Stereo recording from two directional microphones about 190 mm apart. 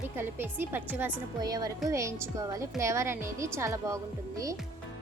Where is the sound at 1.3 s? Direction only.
20° right (ahead or behind).